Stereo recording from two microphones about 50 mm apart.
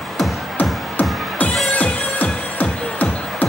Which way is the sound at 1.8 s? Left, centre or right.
Left.